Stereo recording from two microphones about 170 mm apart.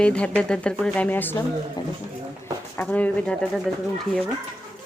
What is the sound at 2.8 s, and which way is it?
Speech, 10° left (ahead or behind).